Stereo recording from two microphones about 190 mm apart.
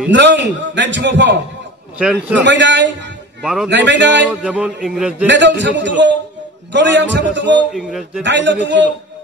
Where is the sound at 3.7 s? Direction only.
65° right (ahead or behind).